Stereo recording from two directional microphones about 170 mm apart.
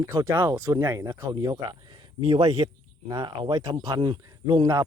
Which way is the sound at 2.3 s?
35° right (ahead or behind).